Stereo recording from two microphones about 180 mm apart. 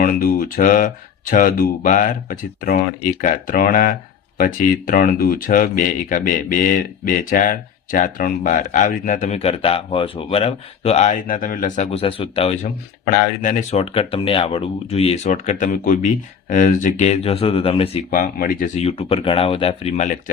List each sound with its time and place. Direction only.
0.0 s speech: 50° left (ahead or behind)
11.9 s speech: 30° left (ahead or behind)
13.1 s speech: 45° left (ahead or behind)
18.1 s speech: 50° left (ahead or behind)
18.8 s speech: 35° left (ahead or behind)